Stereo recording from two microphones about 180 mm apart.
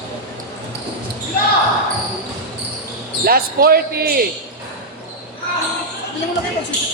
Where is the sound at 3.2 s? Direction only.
55° right (ahead or behind).